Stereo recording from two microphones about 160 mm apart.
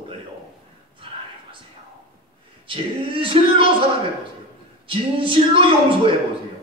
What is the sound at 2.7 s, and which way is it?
Speech, 35° right (ahead or behind).